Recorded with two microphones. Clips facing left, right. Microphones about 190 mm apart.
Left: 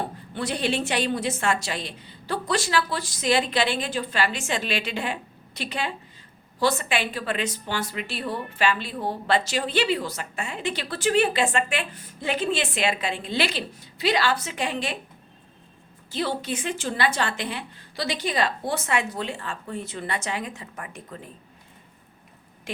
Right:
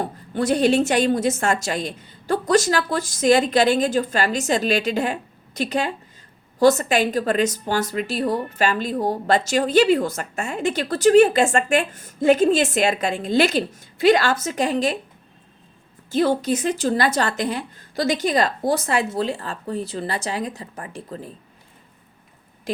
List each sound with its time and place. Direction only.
0.3 s a woman's voice: 45° right (ahead or behind)
16.1 s a woman's voice: 45° right (ahead or behind)